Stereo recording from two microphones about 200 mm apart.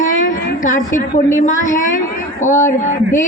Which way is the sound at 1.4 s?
40° left (ahead or behind).